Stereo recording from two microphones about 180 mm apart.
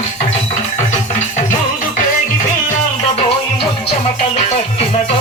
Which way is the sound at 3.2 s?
30° left (ahead or behind).